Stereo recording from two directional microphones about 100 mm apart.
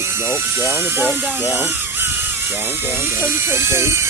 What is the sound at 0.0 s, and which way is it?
Speech, 25° right (ahead or behind).